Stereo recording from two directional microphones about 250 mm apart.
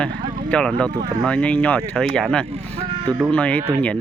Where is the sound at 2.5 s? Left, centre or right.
Right.